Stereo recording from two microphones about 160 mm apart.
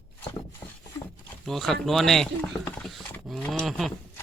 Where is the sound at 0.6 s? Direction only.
30° left (ahead or behind).